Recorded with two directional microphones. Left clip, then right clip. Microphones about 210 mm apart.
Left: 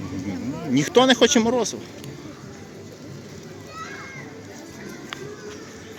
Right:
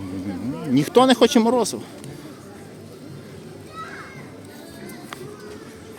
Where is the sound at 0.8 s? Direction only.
15° right (ahead or behind).